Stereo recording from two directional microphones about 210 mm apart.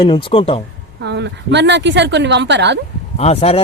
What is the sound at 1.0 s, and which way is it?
A woman's voice, 55° right (ahead or behind).